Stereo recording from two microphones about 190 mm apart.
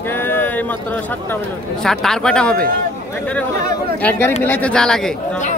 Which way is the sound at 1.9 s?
5° left (ahead or behind).